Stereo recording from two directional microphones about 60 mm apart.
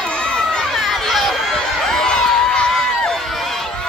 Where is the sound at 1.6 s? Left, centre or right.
Centre.